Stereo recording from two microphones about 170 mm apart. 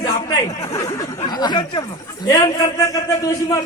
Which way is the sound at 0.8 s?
25° left (ahead or behind).